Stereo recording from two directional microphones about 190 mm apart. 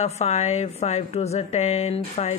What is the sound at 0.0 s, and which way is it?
A woman's voice, 35° left (ahead or behind).